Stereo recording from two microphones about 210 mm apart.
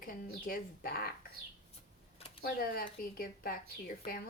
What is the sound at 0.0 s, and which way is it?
Speech, 40° left (ahead or behind).